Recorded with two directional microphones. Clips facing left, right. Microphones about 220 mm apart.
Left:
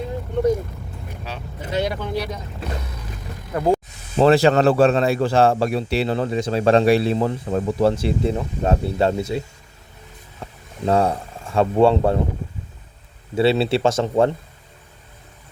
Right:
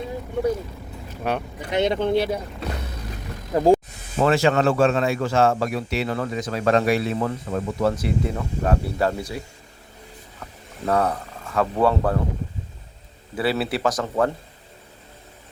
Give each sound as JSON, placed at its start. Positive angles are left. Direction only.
{"t": 1.2, "sound": "speech", "side_deg": -60}
{"t": 1.7, "sound": "speech", "side_deg": -25}
{"t": 2.6, "sound": "music", "side_deg": 0}
{"t": 3.5, "sound": "speech", "side_deg": -25}
{"t": 4.2, "sound": "a man's voice", "side_deg": 35}
{"t": 10.4, "sound": "speech", "side_deg": 25}
{"t": 13.3, "sound": "a man's voice", "side_deg": 25}